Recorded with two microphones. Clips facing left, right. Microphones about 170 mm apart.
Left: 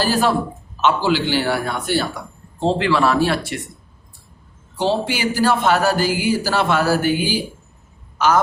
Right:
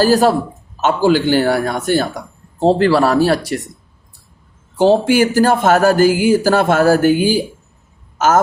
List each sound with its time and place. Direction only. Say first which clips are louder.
0.0 s a man's voice: right 6 dB; 40° right (ahead or behind)
4.8 s speech: right 8 dB; 45° right (ahead or behind)